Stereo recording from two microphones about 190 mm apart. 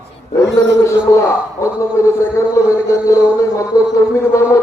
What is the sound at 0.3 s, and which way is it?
Speech, 35° left (ahead or behind).